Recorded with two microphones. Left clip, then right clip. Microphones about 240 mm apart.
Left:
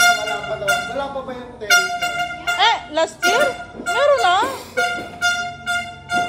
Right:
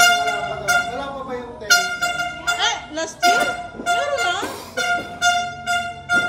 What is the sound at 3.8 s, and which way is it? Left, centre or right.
Music, centre.